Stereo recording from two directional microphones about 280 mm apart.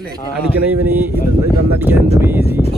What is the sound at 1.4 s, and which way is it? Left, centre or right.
Speech, centre.